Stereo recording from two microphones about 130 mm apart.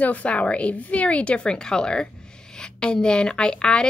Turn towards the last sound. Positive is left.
turn(degrees=5)  # may be behind; listen again after turning